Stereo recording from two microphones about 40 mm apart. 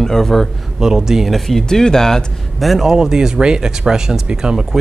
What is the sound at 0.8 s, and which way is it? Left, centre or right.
Speech, centre.